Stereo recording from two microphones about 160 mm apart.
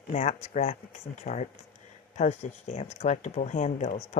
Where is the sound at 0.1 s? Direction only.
45° left (ahead or behind).